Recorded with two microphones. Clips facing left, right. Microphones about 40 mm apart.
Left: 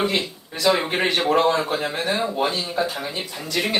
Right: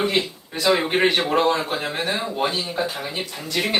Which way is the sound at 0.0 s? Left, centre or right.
Right.